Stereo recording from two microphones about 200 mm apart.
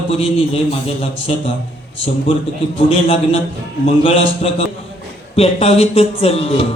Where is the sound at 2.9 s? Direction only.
30° left (ahead or behind).